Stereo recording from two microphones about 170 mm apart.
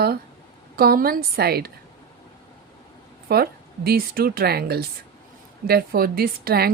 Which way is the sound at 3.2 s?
65° right (ahead or behind).